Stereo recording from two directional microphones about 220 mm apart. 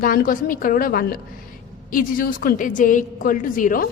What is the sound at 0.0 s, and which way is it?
A woman's voice, 40° left (ahead or behind).